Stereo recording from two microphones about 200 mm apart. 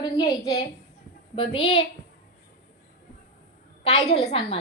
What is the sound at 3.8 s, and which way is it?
Speech, 35° left (ahead or behind).